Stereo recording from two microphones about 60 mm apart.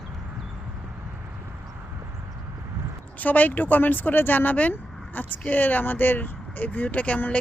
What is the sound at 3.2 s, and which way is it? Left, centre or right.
Speech, left.